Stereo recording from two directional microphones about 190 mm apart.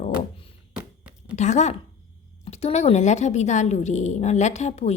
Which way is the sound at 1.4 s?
40° left (ahead or behind).